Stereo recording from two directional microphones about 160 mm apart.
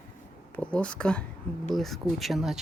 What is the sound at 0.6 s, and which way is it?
Speech, 5° left (ahead or behind).